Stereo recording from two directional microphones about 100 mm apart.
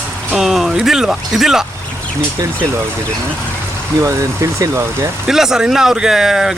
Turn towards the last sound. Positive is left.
turn(degrees=-5)  # may be behind; listen again after turning